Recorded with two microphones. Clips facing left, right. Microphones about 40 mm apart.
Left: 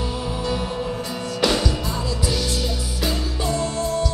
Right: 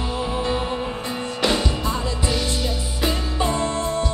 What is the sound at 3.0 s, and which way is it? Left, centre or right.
Music, right.